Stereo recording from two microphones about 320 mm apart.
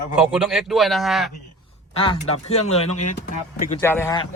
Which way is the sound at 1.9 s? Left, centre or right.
Centre.